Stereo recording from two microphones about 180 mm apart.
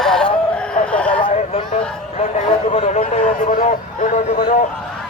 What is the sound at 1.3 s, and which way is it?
Speech, 35° left (ahead or behind).